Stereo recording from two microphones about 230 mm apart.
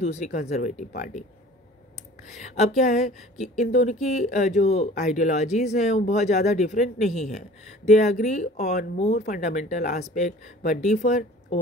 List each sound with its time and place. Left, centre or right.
0.0 s speech: left
2.2 s speech: left